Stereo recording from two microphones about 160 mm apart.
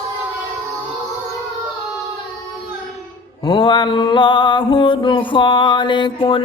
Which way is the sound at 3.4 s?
30° left (ahead or behind).